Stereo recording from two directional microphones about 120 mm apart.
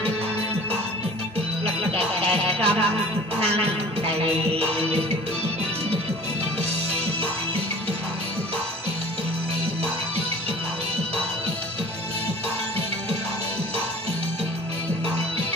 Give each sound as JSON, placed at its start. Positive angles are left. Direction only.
{"t": 1.9, "sound": "music", "side_deg": -55}
{"t": 3.3, "sound": "speech", "side_deg": -55}